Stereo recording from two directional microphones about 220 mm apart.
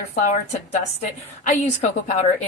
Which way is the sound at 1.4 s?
35° left (ahead or behind).